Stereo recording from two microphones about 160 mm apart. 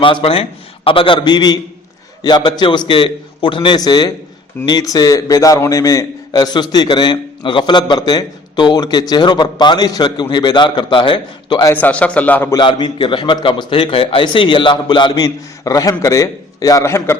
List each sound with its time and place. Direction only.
0.0 s a man's voice: 35° left (ahead or behind)
11.7 s a man's voice: 10° left (ahead or behind)
12.5 s a man's voice: 30° left (ahead or behind)